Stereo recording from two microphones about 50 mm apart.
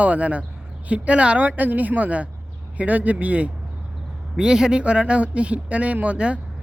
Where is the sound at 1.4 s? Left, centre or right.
Right.